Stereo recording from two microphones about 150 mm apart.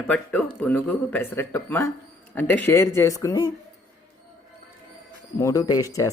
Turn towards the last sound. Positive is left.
turn(degrees=20)  # may be behind; listen again after turning